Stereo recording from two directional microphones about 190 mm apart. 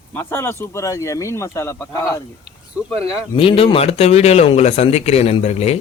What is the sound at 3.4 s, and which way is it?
Speech, 30° left (ahead or behind).